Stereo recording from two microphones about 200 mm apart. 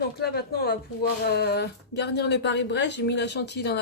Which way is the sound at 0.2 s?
50° left (ahead or behind).